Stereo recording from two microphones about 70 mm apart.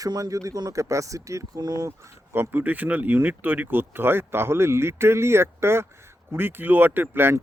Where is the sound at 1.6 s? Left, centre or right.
Right.